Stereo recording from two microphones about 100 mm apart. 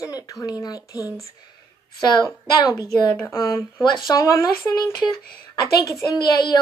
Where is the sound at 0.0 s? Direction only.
35° left (ahead or behind).